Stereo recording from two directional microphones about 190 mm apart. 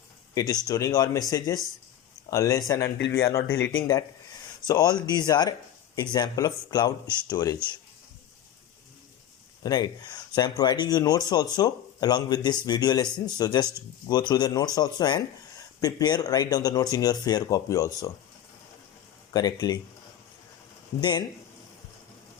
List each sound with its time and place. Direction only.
0.3 s speech: 20° left (ahead or behind)
4.6 s speech: 20° left (ahead or behind)
9.6 s speech: 20° left (ahead or behind)
19.3 s speech: 20° left (ahead or behind)
21.0 s speech: 25° left (ahead or behind)